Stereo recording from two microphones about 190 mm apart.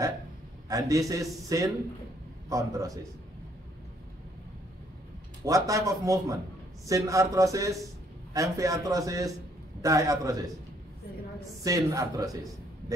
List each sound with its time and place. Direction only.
0.7 s a man's voice: 15° right (ahead or behind)
5.4 s a man's voice: 15° right (ahead or behind)
11.6 s a man's voice: 15° right (ahead or behind)